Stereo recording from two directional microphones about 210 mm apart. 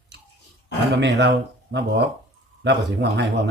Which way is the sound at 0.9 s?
55° right (ahead or behind).